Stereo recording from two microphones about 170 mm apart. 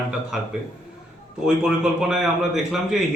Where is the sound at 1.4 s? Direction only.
5° right (ahead or behind).